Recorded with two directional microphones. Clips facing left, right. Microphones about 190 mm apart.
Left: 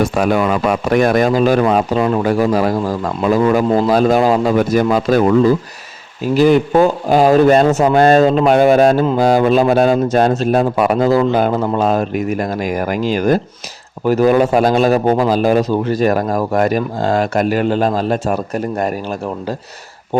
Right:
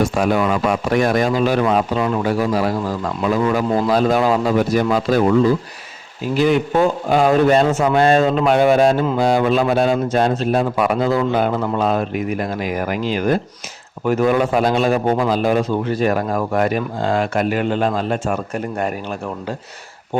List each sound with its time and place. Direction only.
0.0 s speech: 60° left (ahead or behind)
6.3 s a man's voice: 40° left (ahead or behind)